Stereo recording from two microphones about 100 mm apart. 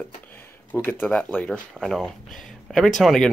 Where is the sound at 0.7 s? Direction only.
20° left (ahead or behind).